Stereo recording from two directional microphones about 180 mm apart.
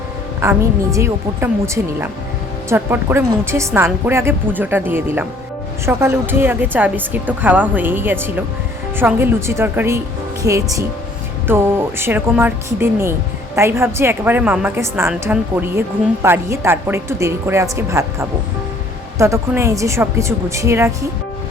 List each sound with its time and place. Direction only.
0.4 s a woman's voice: 15° right (ahead or behind)